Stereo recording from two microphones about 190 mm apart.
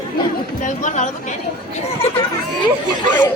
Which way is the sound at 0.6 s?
40° left (ahead or behind).